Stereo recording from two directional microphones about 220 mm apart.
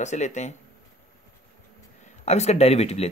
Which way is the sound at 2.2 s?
30° left (ahead or behind).